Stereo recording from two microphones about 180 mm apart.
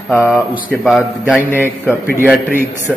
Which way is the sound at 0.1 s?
Centre (ahead or behind).